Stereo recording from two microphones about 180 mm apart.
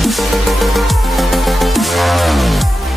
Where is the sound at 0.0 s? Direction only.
Centre (ahead or behind).